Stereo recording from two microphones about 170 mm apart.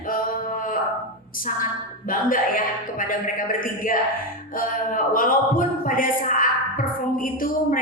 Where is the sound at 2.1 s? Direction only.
55° left (ahead or behind).